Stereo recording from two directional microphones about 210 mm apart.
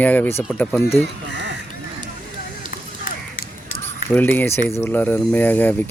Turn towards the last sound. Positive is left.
turn(degrees=10)  # may be behind; listen again after turning